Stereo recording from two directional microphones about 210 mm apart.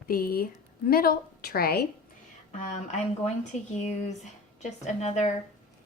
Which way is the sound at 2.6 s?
35° left (ahead or behind).